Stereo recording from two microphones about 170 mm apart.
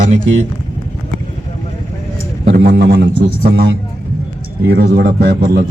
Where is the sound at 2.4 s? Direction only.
90° right.